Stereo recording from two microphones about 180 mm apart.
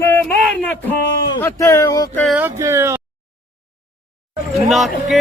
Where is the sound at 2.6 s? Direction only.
15° right (ahead or behind).